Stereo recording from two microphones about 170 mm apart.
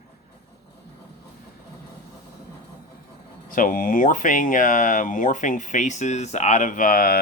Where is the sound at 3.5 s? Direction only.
55° left (ahead or behind).